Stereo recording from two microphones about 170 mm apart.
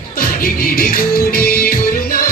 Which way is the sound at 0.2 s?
60° left (ahead or behind).